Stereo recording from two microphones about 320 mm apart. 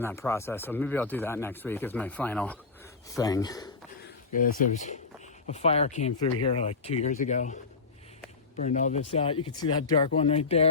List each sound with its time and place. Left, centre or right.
0.0 s speech: centre
4.4 s speech: left
8.6 s speech: left